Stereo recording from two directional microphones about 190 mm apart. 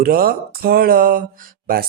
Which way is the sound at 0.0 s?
50° right (ahead or behind).